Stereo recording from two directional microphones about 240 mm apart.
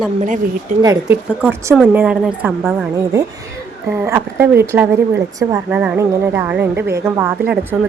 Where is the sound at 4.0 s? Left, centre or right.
Centre.